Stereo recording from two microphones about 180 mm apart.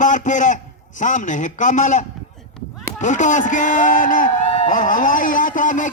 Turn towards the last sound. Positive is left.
turn(degrees=45)  # may be behind; listen again after turning